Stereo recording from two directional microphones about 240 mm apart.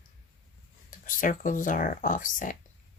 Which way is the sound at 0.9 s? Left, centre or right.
Left.